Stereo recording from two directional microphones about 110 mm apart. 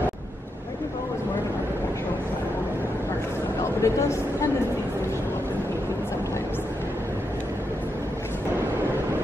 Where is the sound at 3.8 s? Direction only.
25° left (ahead or behind).